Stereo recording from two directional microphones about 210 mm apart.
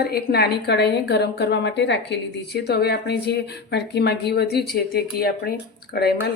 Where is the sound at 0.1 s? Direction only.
50° left (ahead or behind).